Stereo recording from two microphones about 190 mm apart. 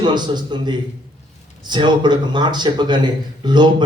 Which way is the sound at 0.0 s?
25° right (ahead or behind).